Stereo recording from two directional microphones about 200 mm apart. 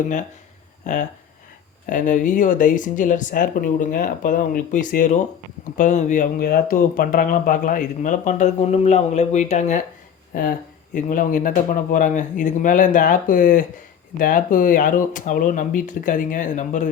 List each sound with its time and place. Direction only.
1.9 s speech: 40° left (ahead or behind)
10.9 s speech: 40° left (ahead or behind)